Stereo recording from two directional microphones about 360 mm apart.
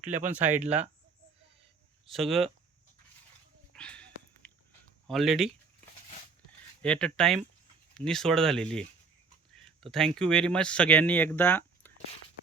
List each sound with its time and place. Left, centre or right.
0.0 s speech: centre
0.3 s speech: centre
2.0 s speech: centre
3.7 s a sound: centre
5.0 s speech: centre
6.8 s speech: centre
9.9 s speech: centre